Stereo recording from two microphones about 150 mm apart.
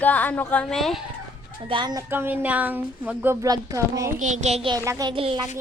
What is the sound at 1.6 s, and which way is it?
Speech, 30° right (ahead or behind).